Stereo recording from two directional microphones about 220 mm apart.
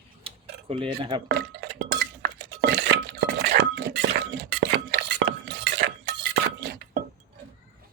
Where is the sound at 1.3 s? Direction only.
50° right (ahead or behind).